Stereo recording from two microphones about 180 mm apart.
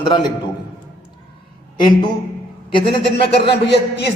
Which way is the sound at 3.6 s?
70° left (ahead or behind).